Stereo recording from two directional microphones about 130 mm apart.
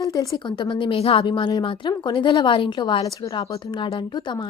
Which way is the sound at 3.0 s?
25° left (ahead or behind).